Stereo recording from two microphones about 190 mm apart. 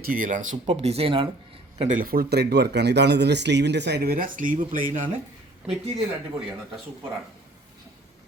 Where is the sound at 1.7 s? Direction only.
40° right (ahead or behind).